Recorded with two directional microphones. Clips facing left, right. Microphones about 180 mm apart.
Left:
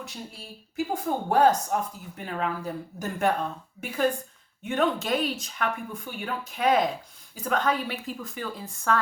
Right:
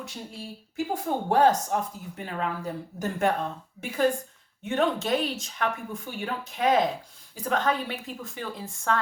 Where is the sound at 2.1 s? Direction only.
30° right (ahead or behind).